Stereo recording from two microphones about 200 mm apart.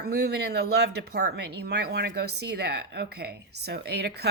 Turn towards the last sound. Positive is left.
turn(degrees=-55)  # may be behind; listen again after turning